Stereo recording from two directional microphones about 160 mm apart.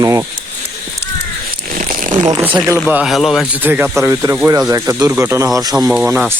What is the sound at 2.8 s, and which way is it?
Speech, 5° right (ahead or behind).